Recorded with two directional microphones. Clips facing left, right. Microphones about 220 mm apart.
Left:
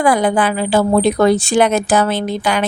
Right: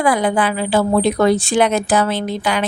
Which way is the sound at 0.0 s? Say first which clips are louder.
Left 2 dB; 45° left (ahead or behind).